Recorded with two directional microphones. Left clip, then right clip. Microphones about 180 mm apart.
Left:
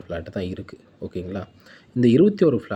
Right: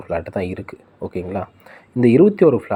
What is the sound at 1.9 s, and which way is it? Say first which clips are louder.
Speech: right 4 dB; 15° left (ahead or behind).